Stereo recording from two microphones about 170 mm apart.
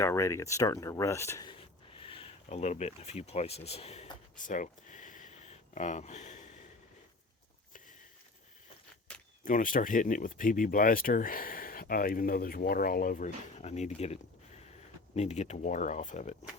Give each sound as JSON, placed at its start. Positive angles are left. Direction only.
{"t": 0.0, "sound": "speech", "side_deg": 15}
{"t": 1.5, "sound": "a sound", "side_deg": 30}
{"t": 9.4, "sound": "speech", "side_deg": 50}